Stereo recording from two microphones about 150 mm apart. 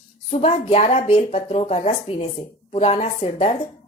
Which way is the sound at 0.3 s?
45° left (ahead or behind).